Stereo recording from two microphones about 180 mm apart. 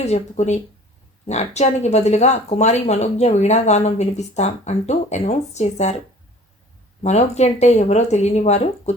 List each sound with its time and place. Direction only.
0.0 s speech: 40° left (ahead or behind)
7.0 s speech: 40° left (ahead or behind)